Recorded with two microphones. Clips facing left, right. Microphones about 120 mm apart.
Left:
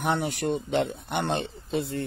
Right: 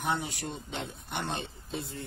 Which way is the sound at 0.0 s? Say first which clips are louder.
Left 6 dB; 60° left (ahead or behind).